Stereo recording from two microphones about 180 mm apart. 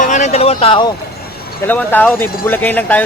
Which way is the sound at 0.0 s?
40° left (ahead or behind).